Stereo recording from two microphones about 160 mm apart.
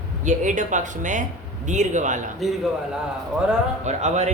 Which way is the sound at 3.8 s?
45° right (ahead or behind).